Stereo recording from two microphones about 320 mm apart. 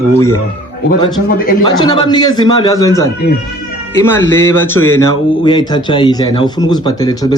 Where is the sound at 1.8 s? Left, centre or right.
Centre.